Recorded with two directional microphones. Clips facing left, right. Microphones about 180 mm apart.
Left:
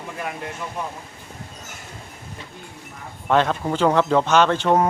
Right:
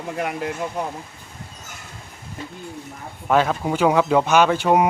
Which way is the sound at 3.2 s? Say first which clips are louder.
Right 1 dB; 5° right (ahead or behind).